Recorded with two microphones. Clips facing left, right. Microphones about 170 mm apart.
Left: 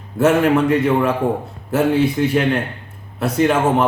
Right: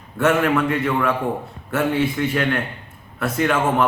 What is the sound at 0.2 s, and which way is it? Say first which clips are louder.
Speech: left 4 dB; 40° left (ahead or behind).